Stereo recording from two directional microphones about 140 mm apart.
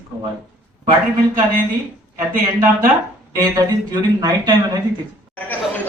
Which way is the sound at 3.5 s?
25° right (ahead or behind).